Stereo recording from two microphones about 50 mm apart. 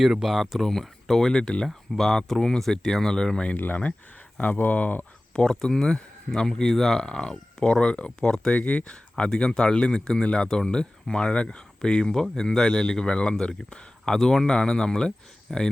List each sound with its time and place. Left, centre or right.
0.0 s speech: centre
0.6 s speech: centre
3.7 s speech: left
5.4 s speech: centre